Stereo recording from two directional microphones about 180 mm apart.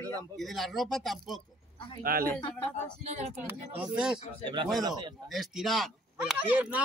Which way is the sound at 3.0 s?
35° right (ahead or behind).